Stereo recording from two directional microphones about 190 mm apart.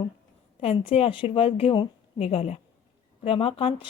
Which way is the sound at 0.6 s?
30° left (ahead or behind).